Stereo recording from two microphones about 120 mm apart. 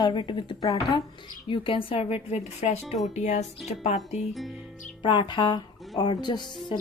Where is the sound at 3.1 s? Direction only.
70° left (ahead or behind).